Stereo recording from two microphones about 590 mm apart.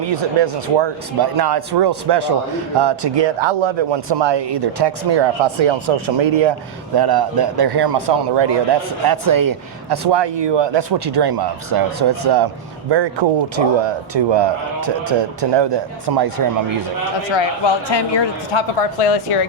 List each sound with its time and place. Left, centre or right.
0.1 s a man's voice: right
6.9 s a man's voice: right
17.2 s speech: left
18.9 s speech: left